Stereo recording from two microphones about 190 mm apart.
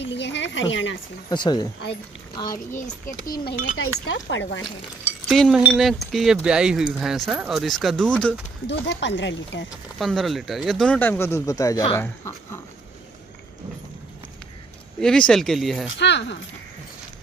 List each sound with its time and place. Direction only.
0.0 s a woman's voice: 65° left (ahead or behind)
1.3 s a child's voice: 25° left (ahead or behind)
3.7 s speech: 85° left
5.3 s speech: centre (ahead or behind)
8.6 s speech: 70° left (ahead or behind)
9.9 s speech: centre (ahead or behind)
15.0 s speech: 5° left (ahead or behind)
16.0 s speech: 65° left (ahead or behind)